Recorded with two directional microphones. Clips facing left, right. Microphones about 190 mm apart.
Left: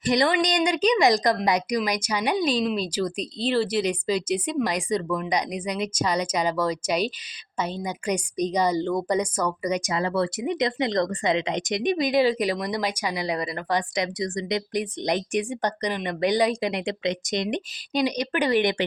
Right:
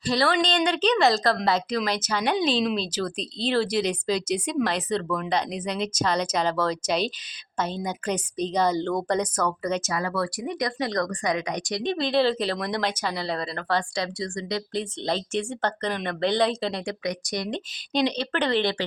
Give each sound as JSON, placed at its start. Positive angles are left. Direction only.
{"t": 0.0, "sound": "speech", "side_deg": 20}
{"t": 10.0, "sound": "speech", "side_deg": 25}
{"t": 17.9, "sound": "speech", "side_deg": 10}